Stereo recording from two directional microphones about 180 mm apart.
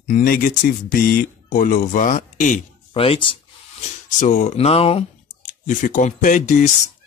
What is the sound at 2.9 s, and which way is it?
Speech, 30° left (ahead or behind).